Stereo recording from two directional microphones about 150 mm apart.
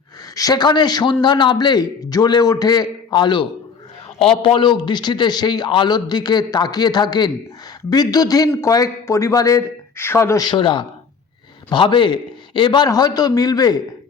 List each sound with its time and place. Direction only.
0.3 s a man's voice: 25° left (ahead or behind)